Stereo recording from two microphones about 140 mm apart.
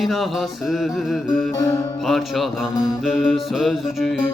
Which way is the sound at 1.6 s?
20° left (ahead or behind).